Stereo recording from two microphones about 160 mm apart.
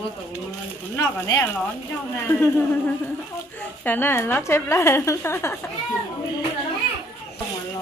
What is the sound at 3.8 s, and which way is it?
A woman's voice, 10° left (ahead or behind).